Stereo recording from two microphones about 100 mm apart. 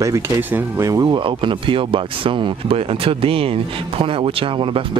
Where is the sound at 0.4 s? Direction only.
20° right (ahead or behind).